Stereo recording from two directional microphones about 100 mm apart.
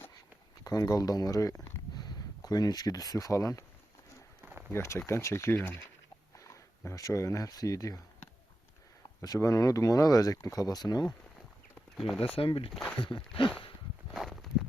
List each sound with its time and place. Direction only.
0.6 s speech: 40° left (ahead or behind)
4.7 s speech: 25° left (ahead or behind)
9.2 s speech: 35° left (ahead or behind)
11.9 s speech: centre (ahead or behind)
12.2 s speech: 65° left (ahead or behind)
13.0 s a sound: 60° left (ahead or behind)
14.1 s walk: centre (ahead or behind)